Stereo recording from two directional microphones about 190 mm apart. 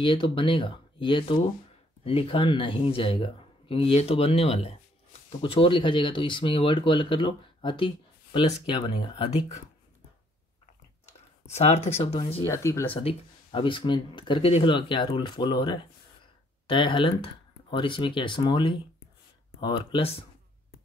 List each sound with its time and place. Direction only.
0.0 s speech: 25° left (ahead or behind)
11.5 s speech: 35° left (ahead or behind)
12.4 s speech: 15° left (ahead or behind)
12.9 s speech: 30° left (ahead or behind)